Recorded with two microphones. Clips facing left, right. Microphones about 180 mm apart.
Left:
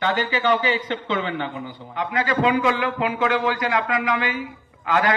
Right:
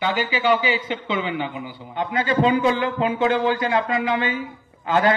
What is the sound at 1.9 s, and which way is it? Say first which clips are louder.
Speech: right 2 dB; 25° right (ahead or behind).